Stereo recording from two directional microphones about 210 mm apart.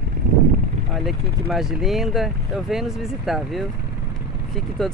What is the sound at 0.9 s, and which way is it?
Speech, centre (ahead or behind).